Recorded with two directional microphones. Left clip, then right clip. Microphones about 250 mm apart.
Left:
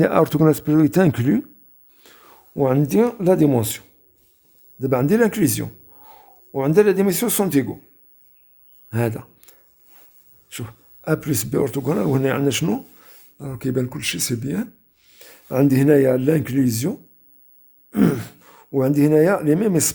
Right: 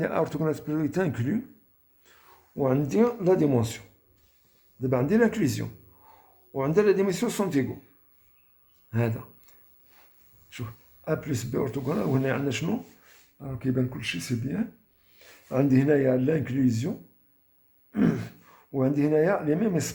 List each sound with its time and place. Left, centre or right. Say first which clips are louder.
0.0 s speech: left 11 dB; left
2.0 s a sound: left 9 dB; left
2.6 s a man's voice: left 6 dB; left
8.9 s a sound: left 6 dB; left
10.5 s speech: left 6 dB; left
17.9 s speech: left 7 dB; left